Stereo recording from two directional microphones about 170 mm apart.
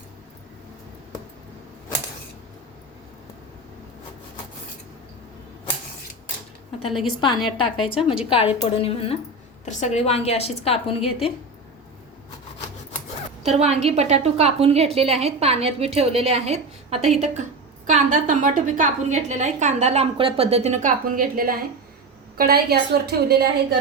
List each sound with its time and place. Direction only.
7.5 s a woman's voice: 30° left (ahead or behind)
13.4 s a woman's voice: 40° right (ahead or behind)
21.0 s a woman's voice: 55° right (ahead or behind)